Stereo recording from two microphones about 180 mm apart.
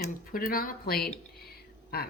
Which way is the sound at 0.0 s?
50° left (ahead or behind).